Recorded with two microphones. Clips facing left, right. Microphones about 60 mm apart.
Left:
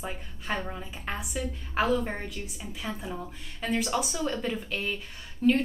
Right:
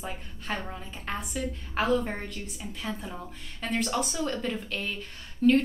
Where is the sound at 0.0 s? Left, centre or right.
Centre.